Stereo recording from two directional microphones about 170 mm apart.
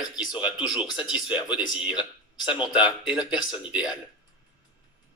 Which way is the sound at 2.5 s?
25° left (ahead or behind).